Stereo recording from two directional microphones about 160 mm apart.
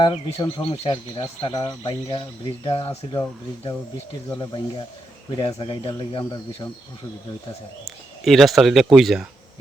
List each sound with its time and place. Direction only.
0.0 s speech: 35° left (ahead or behind)
7.9 s speech: centre (ahead or behind)